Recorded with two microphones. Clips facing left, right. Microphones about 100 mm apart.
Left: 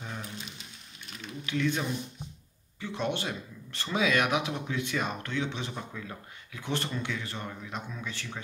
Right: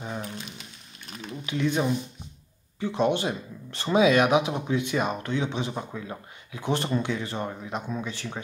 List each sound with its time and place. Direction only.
1.4 s speech: 20° right (ahead or behind)